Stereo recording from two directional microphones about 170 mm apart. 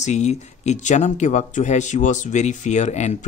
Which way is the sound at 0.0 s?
45° left (ahead or behind).